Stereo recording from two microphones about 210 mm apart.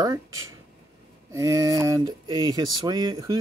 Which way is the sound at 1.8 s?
20° right (ahead or behind).